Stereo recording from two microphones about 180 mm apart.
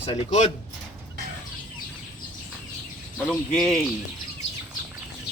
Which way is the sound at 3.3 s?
Centre (ahead or behind).